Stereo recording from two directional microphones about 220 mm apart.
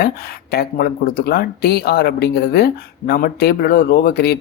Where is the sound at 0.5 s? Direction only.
45° left (ahead or behind).